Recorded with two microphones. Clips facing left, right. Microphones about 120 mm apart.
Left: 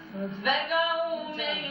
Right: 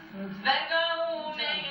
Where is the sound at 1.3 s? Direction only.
30° left (ahead or behind).